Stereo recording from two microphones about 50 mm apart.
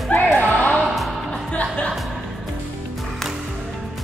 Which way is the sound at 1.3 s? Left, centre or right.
Left.